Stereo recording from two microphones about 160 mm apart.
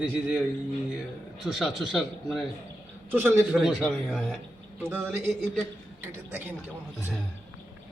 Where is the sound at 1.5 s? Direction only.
Centre (ahead or behind).